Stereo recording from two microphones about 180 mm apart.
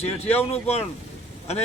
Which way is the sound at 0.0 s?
35° left (ahead or behind).